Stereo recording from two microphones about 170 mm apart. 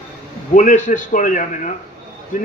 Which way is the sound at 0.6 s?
45° left (ahead or behind).